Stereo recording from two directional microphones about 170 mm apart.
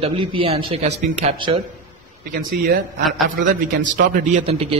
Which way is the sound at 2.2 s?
60° right (ahead or behind).